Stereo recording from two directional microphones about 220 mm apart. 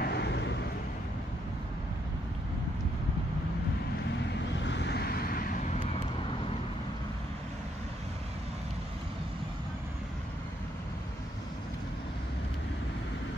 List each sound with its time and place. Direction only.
0.0 s vehicle: 50° left (ahead or behind)
4.6 s vehicle: 50° left (ahead or behind)